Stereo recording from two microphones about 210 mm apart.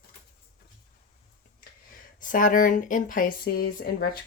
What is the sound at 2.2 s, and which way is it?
Speech, 40° left (ahead or behind).